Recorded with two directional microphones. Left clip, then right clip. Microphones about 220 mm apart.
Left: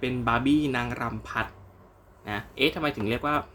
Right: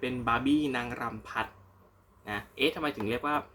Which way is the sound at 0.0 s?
10° left (ahead or behind).